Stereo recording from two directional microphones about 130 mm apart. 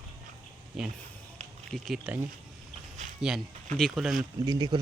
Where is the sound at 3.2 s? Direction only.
5° right (ahead or behind).